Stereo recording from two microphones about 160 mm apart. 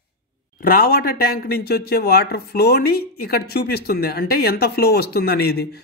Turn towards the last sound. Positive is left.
turn(degrees=80)